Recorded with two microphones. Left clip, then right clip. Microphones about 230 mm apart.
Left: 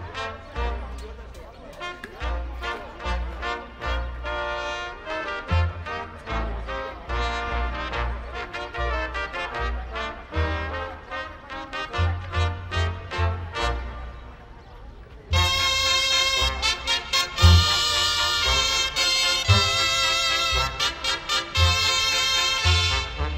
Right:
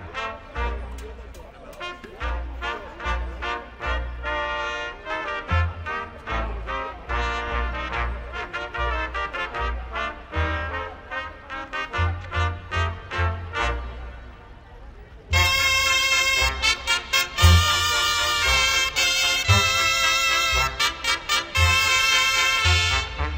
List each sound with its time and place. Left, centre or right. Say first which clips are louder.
0.1 s music: right 2 dB; centre
1.8 s music: right 1 dB; centre
15.3 s music: right 2 dB; centre